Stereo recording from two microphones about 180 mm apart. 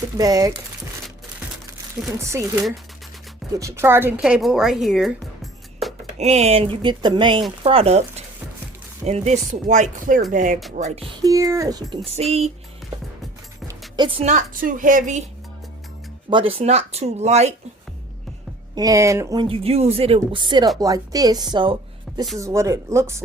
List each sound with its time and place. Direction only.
0.2 s speech: 20° right (ahead or behind)
2.1 s a woman's voice: 15° right (ahead or behind)
6.1 s speech: 40° right (ahead or behind)
11.2 s speech: 20° right (ahead or behind)
13.7 s speech: 25° right (ahead or behind); by 15.2 s 45° right (ahead or behind)
16.3 s speech: 30° right (ahead or behind)
18.7 s speech: 20° right (ahead or behind)